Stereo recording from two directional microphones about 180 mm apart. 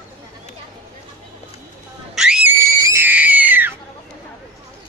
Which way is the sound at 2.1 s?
5° right (ahead or behind).